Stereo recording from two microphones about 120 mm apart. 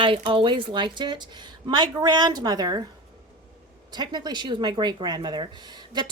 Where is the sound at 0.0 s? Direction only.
45° right (ahead or behind).